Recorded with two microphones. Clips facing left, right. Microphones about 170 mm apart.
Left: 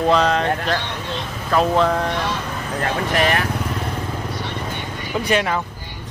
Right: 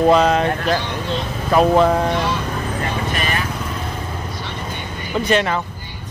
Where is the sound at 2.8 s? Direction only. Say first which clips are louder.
Left 7 dB; 75° left (ahead or behind).